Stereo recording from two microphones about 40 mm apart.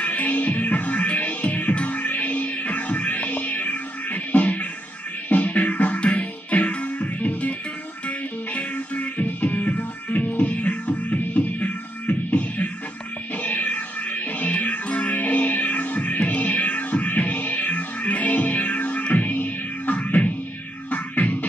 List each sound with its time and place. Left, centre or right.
0.0 s music: left
8.5 s music: left